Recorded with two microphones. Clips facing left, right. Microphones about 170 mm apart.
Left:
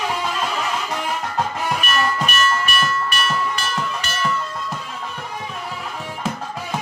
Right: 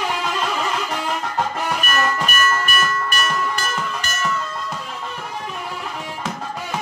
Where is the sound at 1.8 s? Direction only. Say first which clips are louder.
Even; 45° right (ahead or behind).